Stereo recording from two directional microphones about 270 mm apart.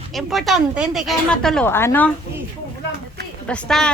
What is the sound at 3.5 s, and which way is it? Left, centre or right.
Speech, centre.